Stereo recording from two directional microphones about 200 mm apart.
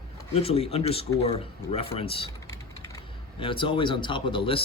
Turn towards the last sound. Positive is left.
turn(degrees=25)  # may be behind; listen again after turning